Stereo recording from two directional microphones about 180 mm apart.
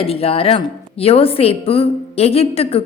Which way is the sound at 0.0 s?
35° left (ahead or behind).